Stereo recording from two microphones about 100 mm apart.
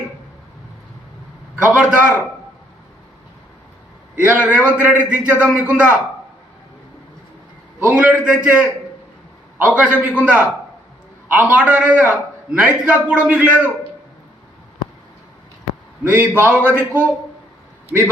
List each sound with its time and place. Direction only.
1.6 s a man's voice: 15° right (ahead or behind)
4.1 s a man's voice: 15° right (ahead or behind)
7.8 s a man's voice: 15° right (ahead or behind)
9.7 s a man's voice: 15° right (ahead or behind)
16.0 s a man's voice: 20° right (ahead or behind)